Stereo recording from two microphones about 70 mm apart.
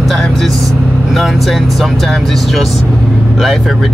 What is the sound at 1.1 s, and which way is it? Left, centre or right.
Speech, centre.